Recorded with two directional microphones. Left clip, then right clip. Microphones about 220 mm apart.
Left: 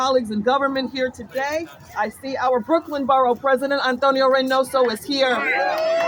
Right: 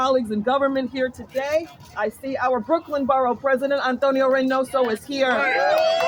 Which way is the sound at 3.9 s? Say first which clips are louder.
Left 3 dB; 60° left (ahead or behind).